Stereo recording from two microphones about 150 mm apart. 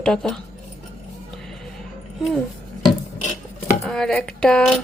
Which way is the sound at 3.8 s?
5° left (ahead or behind).